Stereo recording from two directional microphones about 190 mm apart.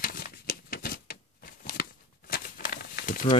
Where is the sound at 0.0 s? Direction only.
50° left (ahead or behind).